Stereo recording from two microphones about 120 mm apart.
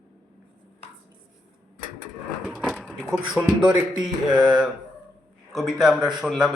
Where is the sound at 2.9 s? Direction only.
5° right (ahead or behind).